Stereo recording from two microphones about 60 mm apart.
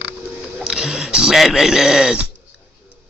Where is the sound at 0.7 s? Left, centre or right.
Centre.